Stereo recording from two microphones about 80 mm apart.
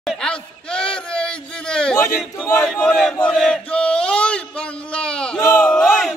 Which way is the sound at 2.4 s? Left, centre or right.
Centre.